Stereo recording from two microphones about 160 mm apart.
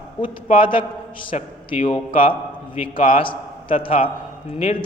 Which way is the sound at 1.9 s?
35° left (ahead or behind).